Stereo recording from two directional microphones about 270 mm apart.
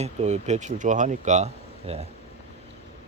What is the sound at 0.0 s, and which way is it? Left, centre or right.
Speech, right.